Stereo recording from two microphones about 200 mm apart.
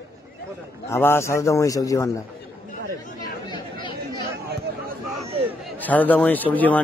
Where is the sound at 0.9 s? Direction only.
10° left (ahead or behind).